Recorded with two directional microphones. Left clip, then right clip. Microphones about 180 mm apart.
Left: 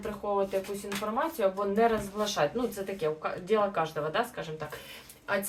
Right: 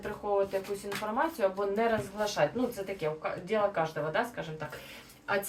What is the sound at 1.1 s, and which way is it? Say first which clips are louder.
A woman's voice: left 1 dB; 15° left (ahead or behind).